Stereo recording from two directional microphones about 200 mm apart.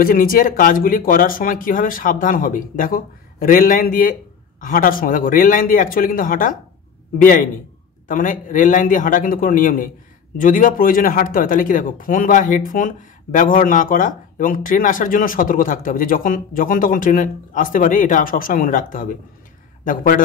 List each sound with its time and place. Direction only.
0.0 s a man's voice: 45° left (ahead or behind)